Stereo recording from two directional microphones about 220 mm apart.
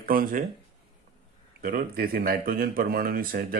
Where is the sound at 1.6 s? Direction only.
40° right (ahead or behind).